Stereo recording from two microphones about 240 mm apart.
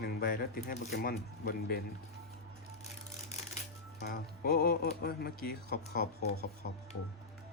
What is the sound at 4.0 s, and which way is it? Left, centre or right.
Speech, left.